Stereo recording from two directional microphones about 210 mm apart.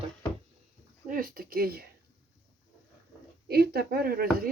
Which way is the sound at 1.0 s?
40° right (ahead or behind).